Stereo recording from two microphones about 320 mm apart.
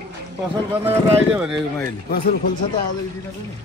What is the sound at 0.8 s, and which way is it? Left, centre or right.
Speech, centre.